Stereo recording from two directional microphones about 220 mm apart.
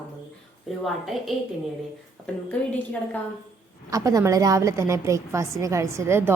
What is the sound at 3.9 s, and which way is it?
A woman's voice, 15° right (ahead or behind).